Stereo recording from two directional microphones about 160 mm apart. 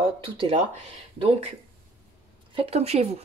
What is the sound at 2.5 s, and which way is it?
Speech, 40° right (ahead or behind).